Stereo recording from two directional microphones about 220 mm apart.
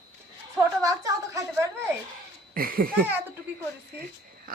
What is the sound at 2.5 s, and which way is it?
Speech, 40° right (ahead or behind).